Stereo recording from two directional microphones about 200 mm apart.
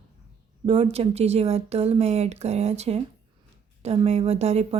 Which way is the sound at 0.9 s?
30° right (ahead or behind).